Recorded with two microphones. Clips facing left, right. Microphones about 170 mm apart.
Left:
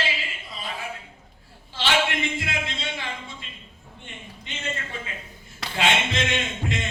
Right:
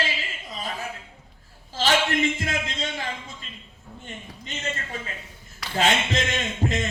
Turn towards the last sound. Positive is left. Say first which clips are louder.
# right 3 dB
turn(degrees=-40)  # may be behind; listen again after turning